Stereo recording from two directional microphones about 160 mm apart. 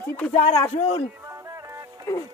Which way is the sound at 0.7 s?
40° left (ahead or behind).